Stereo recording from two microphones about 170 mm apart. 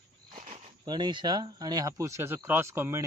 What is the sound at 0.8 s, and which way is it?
Speech, 25° right (ahead or behind).